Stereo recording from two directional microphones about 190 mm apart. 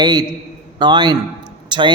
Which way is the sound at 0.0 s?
20° right (ahead or behind).